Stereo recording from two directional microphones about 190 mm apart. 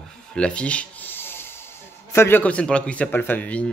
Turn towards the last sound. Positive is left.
turn(degrees=5)  # may be behind; listen again after turning